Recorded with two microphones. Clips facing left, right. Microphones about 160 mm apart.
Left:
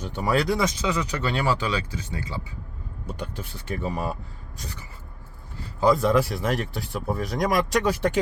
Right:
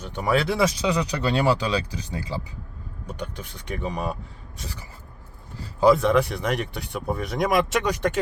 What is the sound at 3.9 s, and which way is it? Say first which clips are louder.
Speech: right 1 dB; centre (ahead or behind).